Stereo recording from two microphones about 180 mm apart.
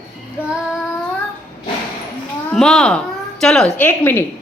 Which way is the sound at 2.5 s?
5° left (ahead or behind).